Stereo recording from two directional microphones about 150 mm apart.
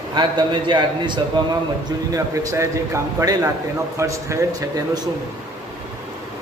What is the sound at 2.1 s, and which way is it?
A man's voice, 20° right (ahead or behind).